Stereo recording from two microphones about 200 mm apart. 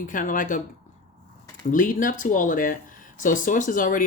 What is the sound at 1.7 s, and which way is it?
Speech, 40° left (ahead or behind).